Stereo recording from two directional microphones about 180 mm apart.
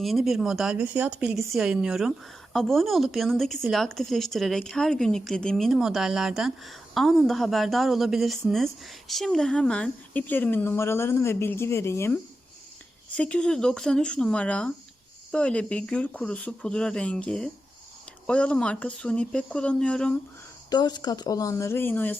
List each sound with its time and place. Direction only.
0.0 s a woman's voice: centre (ahead or behind)
20.7 s speech: 25° left (ahead or behind)